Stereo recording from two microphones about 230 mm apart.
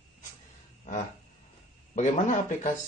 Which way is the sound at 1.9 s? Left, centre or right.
Left.